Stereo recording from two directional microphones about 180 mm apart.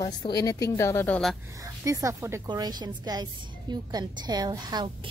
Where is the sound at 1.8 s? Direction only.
15° right (ahead or behind).